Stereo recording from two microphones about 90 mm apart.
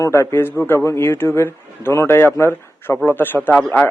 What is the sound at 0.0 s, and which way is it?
Speech, 30° left (ahead or behind).